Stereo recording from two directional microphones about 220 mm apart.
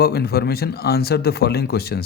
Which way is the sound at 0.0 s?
45° left (ahead or behind).